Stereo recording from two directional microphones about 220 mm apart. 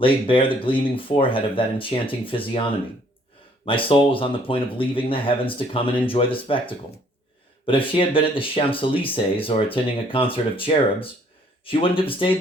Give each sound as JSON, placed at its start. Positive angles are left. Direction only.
{"t": 0.0, "sound": "speech", "side_deg": 25}
{"t": 3.7, "sound": "speech", "side_deg": 25}